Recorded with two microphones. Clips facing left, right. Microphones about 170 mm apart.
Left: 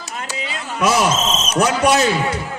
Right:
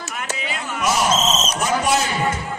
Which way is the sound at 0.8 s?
80° left.